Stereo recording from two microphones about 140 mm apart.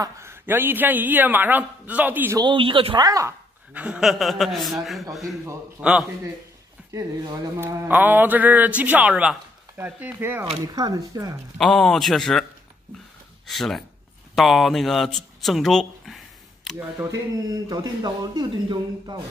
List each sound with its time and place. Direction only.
0.0 s speech: 20° right (ahead or behind)
2.3 s speech: 35° right (ahead or behind)
3.7 s a man's voice: 10° right (ahead or behind)
6.9 s speech: 25° right (ahead or behind)
10.7 s speech: 25° right (ahead or behind)
11.5 s a man's voice: 5° left (ahead or behind)
13.5 s a man's voice: centre (ahead or behind)
17.6 s speech: 30° right (ahead or behind)